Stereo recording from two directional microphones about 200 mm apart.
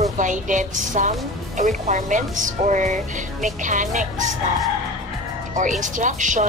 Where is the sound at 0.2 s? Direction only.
40° right (ahead or behind).